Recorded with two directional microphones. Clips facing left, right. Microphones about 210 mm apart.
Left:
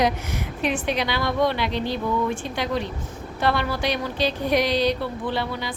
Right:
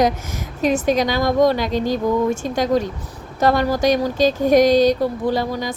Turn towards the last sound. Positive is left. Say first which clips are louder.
# right 6 dB
turn(degrees=-40)  # may be behind; listen again after turning